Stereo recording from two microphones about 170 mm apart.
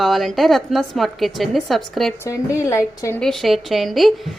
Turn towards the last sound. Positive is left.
turn(degrees=0)  # may be behind; listen again after turning